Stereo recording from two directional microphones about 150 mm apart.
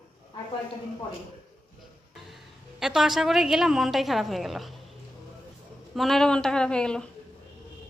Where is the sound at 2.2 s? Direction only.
Centre (ahead or behind).